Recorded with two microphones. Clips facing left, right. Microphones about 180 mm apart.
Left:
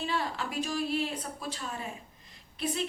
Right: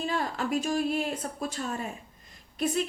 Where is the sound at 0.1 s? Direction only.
45° right (ahead or behind).